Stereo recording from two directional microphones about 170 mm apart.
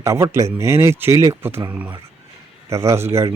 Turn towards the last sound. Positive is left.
turn(degrees=-15)  # may be behind; listen again after turning